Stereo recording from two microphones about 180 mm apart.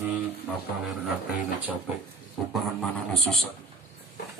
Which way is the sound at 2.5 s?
Centre (ahead or behind).